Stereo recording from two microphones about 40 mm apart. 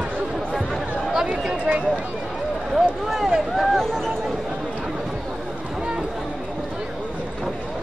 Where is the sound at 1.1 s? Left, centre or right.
Right.